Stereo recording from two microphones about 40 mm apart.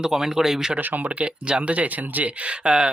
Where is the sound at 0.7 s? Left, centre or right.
Right.